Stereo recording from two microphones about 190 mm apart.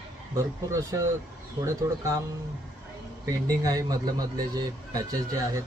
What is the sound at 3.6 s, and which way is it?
A man's voice, 20° right (ahead or behind).